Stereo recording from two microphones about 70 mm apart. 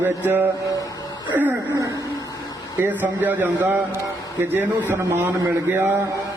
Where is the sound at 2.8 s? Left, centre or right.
Right.